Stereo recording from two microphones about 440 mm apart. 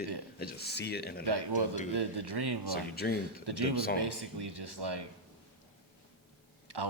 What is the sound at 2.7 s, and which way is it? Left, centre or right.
Speech, left.